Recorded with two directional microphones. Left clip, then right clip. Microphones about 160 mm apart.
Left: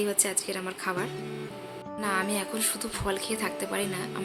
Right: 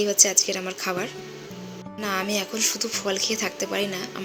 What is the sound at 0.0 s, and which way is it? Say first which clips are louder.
A woman's voice: right 9 dB; 15° right (ahead or behind).